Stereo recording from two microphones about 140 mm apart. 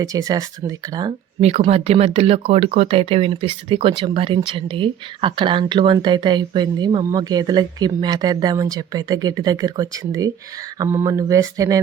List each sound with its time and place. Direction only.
0.0 s speech: 25° right (ahead or behind)
1.4 s speech: 50° right (ahead or behind); by 11.8 s 25° right (ahead or behind)